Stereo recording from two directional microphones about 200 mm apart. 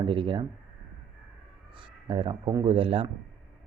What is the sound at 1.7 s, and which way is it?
Speech, 25° right (ahead or behind).